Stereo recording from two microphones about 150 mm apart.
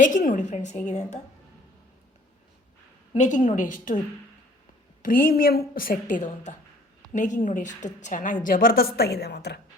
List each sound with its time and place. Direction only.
0.0 s a woman's voice: 60° left (ahead or behind)
3.2 s a woman's voice: 55° left (ahead or behind)
5.0 s a woman's voice: 70° left (ahead or behind); by 9.6 s 90° left